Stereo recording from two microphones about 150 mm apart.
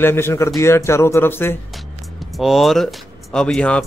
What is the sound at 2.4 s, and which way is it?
Speech, centre (ahead or behind).